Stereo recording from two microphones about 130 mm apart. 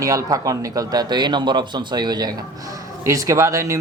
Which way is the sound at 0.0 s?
25° right (ahead or behind).